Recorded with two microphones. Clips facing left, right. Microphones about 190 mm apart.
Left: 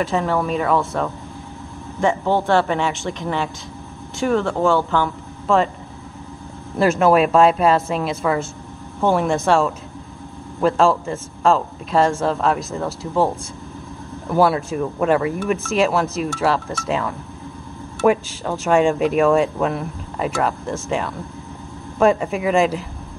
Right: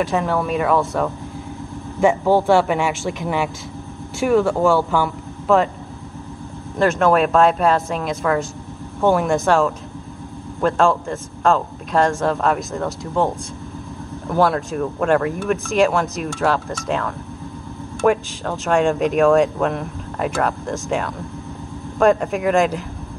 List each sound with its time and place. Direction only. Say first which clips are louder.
0.0 s speech: even; centre (ahead or behind)
2.0 s speech: right 3 dB; 10° right (ahead or behind)
6.8 s speech: left 1 dB; 5° left (ahead or behind)
14.3 s speech: left 1 dB; 5° left (ahead or behind)